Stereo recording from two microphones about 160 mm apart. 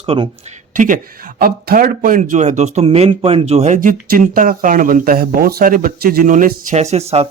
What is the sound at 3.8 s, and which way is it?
Speech, 55° right (ahead or behind).